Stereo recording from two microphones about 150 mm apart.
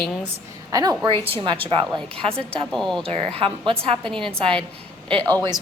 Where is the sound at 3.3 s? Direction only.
40° right (ahead or behind).